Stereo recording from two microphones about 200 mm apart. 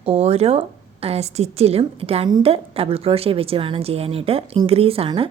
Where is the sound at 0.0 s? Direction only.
30° right (ahead or behind).